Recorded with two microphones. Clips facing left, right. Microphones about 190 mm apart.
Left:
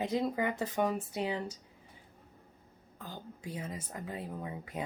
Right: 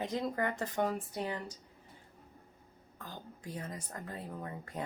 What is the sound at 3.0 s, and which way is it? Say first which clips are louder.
Speech: left 2 dB; 10° left (ahead or behind).